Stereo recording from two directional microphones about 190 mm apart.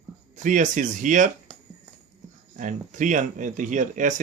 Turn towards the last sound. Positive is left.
turn(degrees=-40)  # may be behind; listen again after turning